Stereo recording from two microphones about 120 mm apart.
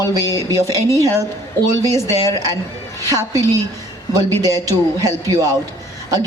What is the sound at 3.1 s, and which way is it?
Speech, 30° right (ahead or behind).